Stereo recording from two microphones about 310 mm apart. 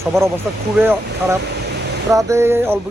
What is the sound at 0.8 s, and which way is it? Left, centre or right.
Speech, centre.